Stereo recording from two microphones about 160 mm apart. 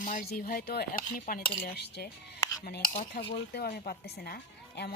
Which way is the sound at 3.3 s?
75° left (ahead or behind).